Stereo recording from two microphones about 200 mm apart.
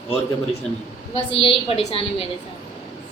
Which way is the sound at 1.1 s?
25° left (ahead or behind).